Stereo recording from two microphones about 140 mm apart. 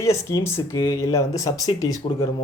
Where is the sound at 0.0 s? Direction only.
20° left (ahead or behind).